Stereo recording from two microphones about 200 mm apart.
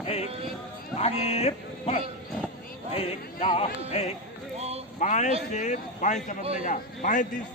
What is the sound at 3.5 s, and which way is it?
Speech, 30° left (ahead or behind).